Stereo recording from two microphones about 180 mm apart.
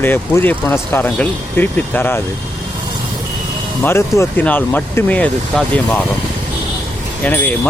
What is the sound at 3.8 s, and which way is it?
Speech, 15° left (ahead or behind).